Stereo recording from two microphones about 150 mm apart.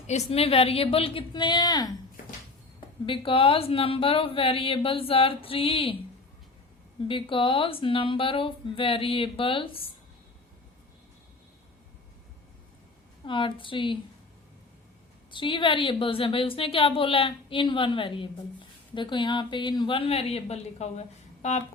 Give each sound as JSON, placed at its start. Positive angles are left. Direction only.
{"t": 0.1, "sound": "a woman's voice", "side_deg": 40}
{"t": 3.1, "sound": "a woman's voice", "side_deg": 35}
{"t": 7.1, "sound": "a woman's voice", "side_deg": 35}
{"t": 13.2, "sound": "a woman's voice", "side_deg": 35}
{"t": 15.3, "sound": "a woman's voice", "side_deg": 35}